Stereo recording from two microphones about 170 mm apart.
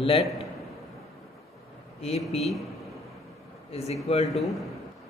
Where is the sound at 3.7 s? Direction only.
40° left (ahead or behind).